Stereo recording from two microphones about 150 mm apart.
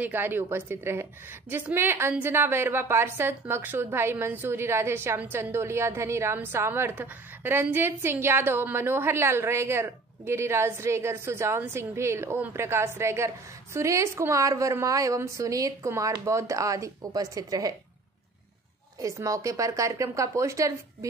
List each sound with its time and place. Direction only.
0.0 s a woman's voice: 15° right (ahead or behind)
18.9 s a woman's voice: 20° right (ahead or behind)